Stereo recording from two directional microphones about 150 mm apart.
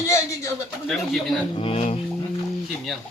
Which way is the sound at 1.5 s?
40° left (ahead or behind).